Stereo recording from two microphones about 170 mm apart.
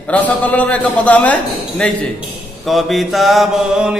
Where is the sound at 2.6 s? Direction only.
Centre (ahead or behind).